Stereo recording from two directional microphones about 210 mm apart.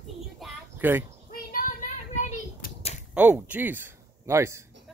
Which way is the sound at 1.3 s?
40° left (ahead or behind).